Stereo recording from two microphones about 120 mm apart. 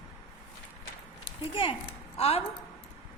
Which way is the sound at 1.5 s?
45° left (ahead or behind).